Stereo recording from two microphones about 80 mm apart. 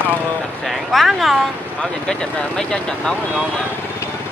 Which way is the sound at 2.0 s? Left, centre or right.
Centre.